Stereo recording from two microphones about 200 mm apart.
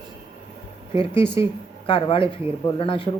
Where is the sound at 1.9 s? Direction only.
25° left (ahead or behind).